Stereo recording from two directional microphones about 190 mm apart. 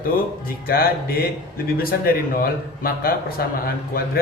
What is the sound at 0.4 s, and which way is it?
A man's voice, 50° left (ahead or behind).